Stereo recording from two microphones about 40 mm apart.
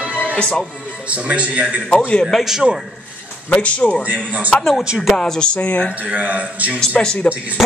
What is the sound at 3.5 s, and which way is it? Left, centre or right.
Speech, left.